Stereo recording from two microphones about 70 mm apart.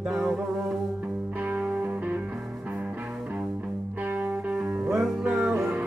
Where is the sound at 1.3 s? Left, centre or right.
Right.